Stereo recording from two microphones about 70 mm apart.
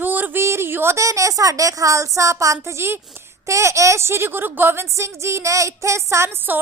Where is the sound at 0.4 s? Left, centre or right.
Right.